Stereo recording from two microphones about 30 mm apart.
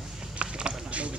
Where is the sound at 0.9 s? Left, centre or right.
Right.